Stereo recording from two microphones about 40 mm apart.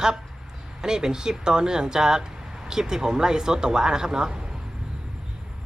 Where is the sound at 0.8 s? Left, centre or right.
Centre.